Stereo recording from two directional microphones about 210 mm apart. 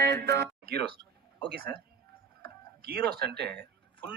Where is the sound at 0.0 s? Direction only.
50° right (ahead or behind).